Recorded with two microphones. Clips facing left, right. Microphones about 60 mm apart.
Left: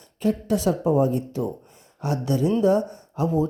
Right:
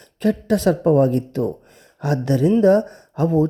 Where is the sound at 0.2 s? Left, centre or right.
Right.